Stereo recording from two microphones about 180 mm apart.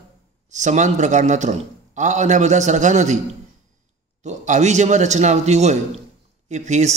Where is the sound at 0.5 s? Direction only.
40° right (ahead or behind).